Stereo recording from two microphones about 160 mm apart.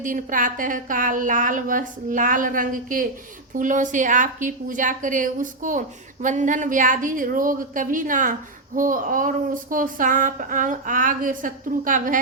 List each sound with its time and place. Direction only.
0.0 s a woman's voice: 55° right (ahead or behind)